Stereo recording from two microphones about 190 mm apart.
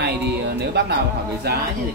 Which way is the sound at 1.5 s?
60° right (ahead or behind).